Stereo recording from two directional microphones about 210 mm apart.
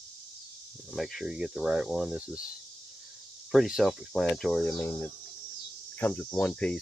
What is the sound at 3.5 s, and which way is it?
Speech, centre (ahead or behind).